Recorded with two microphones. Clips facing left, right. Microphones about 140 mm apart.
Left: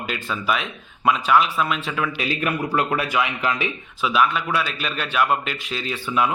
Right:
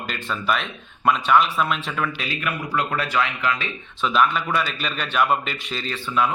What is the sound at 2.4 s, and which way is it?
Speech, 25° left (ahead or behind).